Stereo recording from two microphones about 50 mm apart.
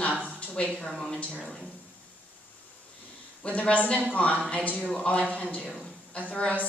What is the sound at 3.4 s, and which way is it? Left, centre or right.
A woman's voice, left.